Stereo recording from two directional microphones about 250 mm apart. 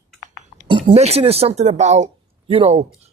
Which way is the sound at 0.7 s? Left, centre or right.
Right.